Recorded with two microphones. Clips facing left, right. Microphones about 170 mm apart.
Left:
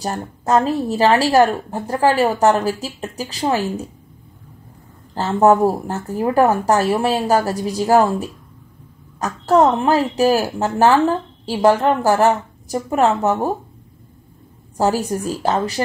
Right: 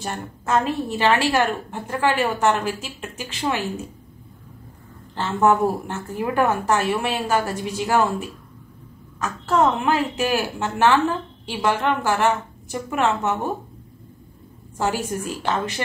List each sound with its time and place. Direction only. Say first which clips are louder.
0.0 s a woman's voice: left 5 dB; 40° left (ahead or behind)
5.1 s a woman's voice: left 5 dB; 40° left (ahead or behind)
14.8 s a woman's voice: left 6 dB; 35° left (ahead or behind)